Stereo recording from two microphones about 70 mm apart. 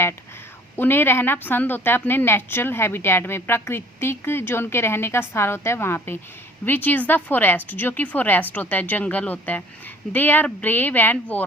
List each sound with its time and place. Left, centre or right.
0.8 s a woman's voice: left